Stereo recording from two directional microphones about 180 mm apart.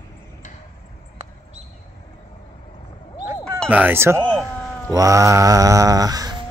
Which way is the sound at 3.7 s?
10° right (ahead or behind).